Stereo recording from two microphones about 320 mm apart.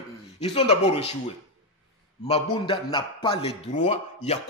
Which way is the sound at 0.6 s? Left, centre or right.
Centre.